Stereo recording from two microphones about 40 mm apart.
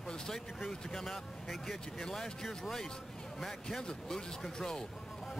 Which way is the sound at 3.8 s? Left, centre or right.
Centre.